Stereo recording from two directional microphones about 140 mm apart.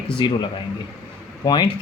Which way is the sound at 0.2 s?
35° left (ahead or behind).